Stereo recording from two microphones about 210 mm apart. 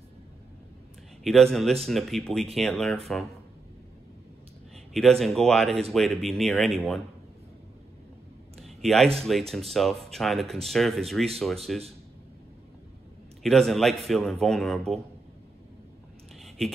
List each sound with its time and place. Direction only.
1.2 s speech: centre (ahead or behind)
5.2 s speech: centre (ahead or behind)
8.5 s a sound: centre (ahead or behind)
9.2 s speech: centre (ahead or behind)
13.4 s speech: centre (ahead or behind)
16.3 s a sound: centre (ahead or behind)